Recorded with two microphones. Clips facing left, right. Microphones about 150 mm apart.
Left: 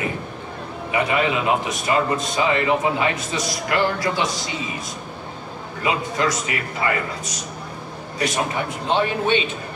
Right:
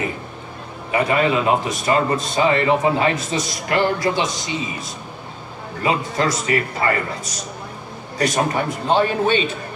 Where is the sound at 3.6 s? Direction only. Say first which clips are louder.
Right 3 dB; 25° right (ahead or behind).